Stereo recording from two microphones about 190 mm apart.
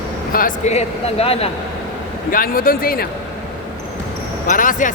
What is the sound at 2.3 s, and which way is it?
Speech, 50° left (ahead or behind).